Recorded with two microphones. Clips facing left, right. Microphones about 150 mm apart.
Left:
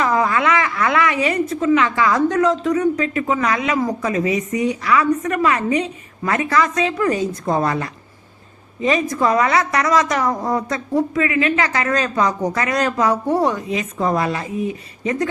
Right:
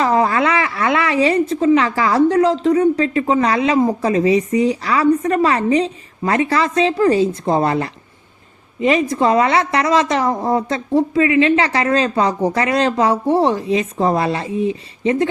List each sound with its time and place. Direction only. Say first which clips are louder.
0.0 s a woman's voice: right 2 dB; 30° right (ahead or behind)